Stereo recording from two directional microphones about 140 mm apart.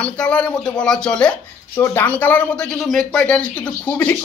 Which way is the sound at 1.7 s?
20° left (ahead or behind).